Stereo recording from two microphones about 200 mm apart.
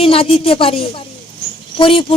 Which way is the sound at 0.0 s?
30° left (ahead or behind).